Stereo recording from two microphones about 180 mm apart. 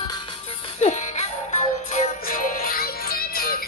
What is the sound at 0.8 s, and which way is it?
Music, 40° left (ahead or behind).